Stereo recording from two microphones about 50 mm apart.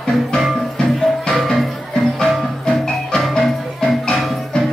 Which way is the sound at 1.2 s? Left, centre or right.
Centre.